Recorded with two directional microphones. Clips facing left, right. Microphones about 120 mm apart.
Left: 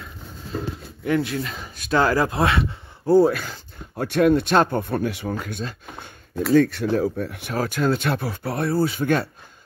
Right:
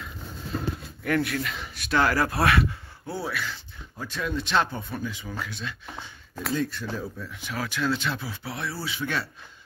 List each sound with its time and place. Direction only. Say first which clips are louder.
1.0 s speech: left 3 dB; 25° left (ahead or behind)
3.1 s speech: left 15 dB; 45° left (ahead or behind)
3.9 s speech: left 13 dB; 65° left (ahead or behind); by 6.0 s 50° left (ahead or behind)
6.5 s speech: left 12 dB; 65° left (ahead or behind)
7.5 s speech: left 6 dB; 45° left (ahead or behind)